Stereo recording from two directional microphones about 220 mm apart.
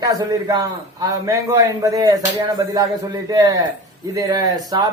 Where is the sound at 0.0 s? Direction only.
15° right (ahead or behind).